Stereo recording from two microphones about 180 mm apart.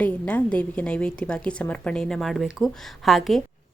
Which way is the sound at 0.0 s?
5° left (ahead or behind).